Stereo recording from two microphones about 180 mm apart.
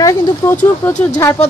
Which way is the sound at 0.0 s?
15° left (ahead or behind).